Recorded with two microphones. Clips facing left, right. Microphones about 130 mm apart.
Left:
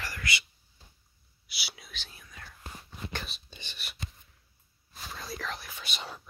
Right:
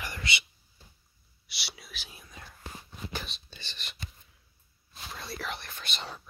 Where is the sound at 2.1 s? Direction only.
20° right (ahead or behind).